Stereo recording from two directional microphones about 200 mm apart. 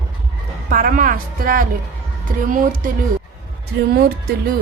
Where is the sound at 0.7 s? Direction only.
45° right (ahead or behind).